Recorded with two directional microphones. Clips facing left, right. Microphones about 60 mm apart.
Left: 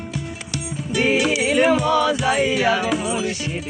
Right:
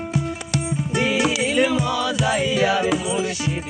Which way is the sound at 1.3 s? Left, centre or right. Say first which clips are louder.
Left 3 dB; left.